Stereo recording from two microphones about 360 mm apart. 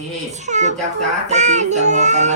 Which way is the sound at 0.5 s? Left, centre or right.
Centre.